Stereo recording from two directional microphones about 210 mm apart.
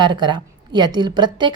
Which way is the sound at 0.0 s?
20° right (ahead or behind).